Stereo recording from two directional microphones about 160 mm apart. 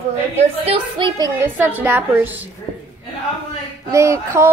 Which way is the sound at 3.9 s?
20° right (ahead or behind).